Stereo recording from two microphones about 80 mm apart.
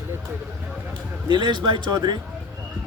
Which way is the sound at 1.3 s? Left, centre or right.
Right.